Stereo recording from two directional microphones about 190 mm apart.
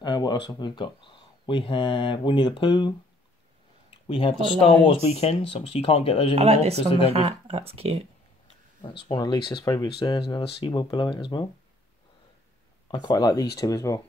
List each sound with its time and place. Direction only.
0.0 s speech: 20° left (ahead or behind)
4.1 s speech: 30° left (ahead or behind)
6.3 s speech: 30° right (ahead or behind)
9.0 s speech: 25° left (ahead or behind)
12.9 s speech: 25° left (ahead or behind)